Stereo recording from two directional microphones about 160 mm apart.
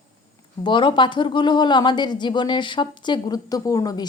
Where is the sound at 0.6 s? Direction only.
30° left (ahead or behind).